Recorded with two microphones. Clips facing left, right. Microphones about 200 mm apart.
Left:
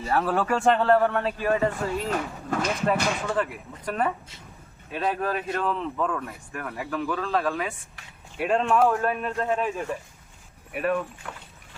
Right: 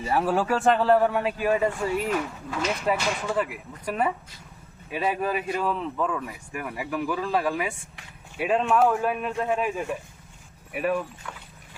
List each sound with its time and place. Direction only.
0.0 s speech: 10° right (ahead or behind)
11.2 s speech: 55° left (ahead or behind)